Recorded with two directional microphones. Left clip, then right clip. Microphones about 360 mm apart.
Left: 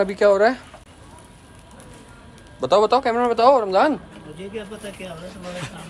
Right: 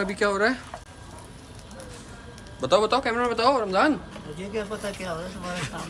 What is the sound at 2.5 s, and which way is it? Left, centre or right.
A man's voice, centre.